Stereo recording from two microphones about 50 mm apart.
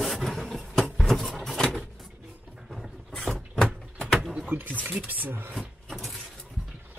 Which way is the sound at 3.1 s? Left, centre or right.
Centre.